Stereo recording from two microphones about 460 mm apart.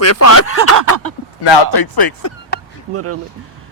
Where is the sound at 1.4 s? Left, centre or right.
Left.